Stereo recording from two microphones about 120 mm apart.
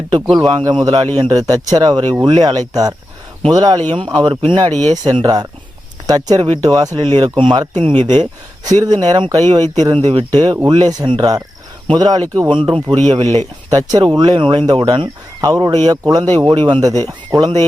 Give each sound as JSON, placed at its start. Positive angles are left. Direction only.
{"t": 0.1, "sound": "a man's voice", "side_deg": -35}
{"t": 10.3, "sound": "a man's voice", "side_deg": -30}
{"t": 12.5, "sound": "a man's voice", "side_deg": -45}